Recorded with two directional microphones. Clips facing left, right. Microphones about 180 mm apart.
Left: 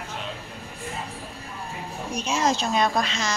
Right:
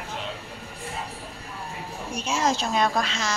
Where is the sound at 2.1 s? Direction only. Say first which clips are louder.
Left 1 dB; 10° right (ahead or behind).